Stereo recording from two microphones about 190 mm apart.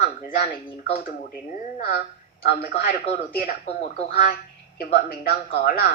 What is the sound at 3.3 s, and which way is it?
A woman's voice, 45° left (ahead or behind).